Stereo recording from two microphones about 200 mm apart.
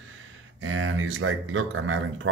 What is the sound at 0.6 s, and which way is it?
Speech, 75° right (ahead or behind).